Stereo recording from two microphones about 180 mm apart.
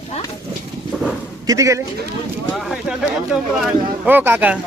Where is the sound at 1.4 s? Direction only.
15° right (ahead or behind).